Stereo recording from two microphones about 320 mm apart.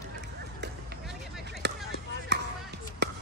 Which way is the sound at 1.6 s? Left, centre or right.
Right.